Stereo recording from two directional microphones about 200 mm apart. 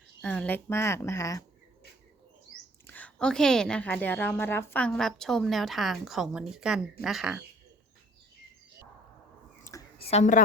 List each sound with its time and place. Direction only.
0.2 s speech: 5° left (ahead or behind)
2.8 s a woman's voice: 10° left (ahead or behind)
9.7 s a sound: 15° left (ahead or behind)
10.1 s a woman's voice: 35° left (ahead or behind)